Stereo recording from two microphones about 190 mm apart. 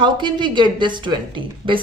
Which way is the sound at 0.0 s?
25° right (ahead or behind).